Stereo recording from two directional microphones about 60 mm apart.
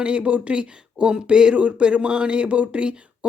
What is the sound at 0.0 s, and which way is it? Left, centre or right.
Speech, centre.